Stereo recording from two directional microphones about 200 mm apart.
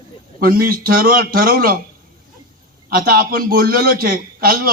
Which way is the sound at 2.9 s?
45° right (ahead or behind).